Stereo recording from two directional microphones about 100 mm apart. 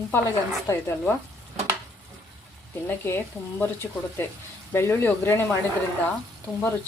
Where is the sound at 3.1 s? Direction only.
20° left (ahead or behind).